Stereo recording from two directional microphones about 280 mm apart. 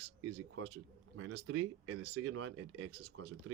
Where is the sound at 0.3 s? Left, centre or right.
Right.